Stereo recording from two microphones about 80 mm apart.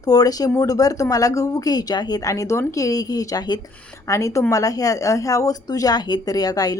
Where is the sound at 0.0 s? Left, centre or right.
Left.